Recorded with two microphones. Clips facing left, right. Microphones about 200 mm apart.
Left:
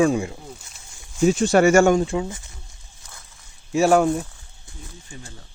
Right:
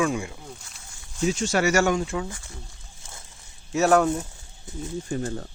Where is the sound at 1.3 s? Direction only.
55° left (ahead or behind).